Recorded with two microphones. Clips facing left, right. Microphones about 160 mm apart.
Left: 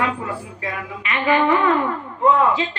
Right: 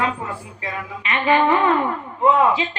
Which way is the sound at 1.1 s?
25° right (ahead or behind).